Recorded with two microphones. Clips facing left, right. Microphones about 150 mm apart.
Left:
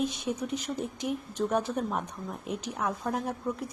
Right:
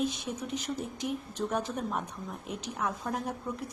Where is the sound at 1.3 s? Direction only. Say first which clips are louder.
Left 5 dB; 10° left (ahead or behind).